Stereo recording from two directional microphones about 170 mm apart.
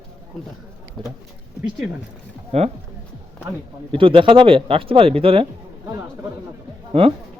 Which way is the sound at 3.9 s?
30° right (ahead or behind).